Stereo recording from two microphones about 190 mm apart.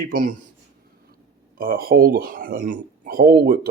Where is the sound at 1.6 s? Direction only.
50° right (ahead or behind).